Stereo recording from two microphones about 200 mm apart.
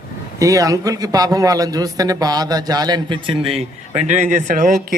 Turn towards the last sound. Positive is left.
turn(degrees=-40)  # may be behind; listen again after turning